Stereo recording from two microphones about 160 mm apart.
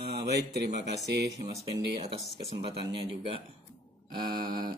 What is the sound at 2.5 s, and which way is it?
Speech, 35° right (ahead or behind).